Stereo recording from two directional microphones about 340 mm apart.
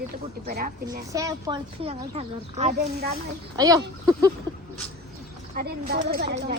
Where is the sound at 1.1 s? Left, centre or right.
Centre.